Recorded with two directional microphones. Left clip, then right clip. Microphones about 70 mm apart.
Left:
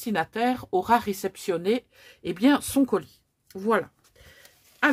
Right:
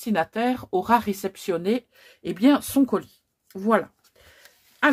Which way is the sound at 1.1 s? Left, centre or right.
Left.